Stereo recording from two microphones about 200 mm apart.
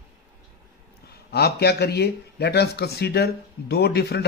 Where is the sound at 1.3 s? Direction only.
55° left (ahead or behind).